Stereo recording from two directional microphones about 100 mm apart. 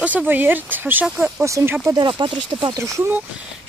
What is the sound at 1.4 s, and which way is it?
Speech, 30° right (ahead or behind).